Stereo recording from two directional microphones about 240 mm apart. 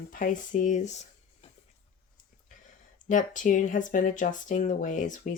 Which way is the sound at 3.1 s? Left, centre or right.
Left.